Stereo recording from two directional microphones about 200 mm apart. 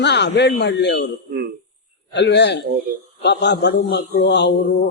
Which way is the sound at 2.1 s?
60° left (ahead or behind).